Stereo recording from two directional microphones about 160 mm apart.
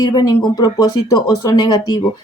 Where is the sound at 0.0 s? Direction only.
25° left (ahead or behind).